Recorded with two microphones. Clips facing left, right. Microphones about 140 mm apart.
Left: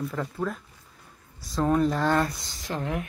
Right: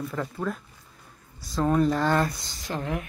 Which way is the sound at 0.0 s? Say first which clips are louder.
Even; centre (ahead or behind).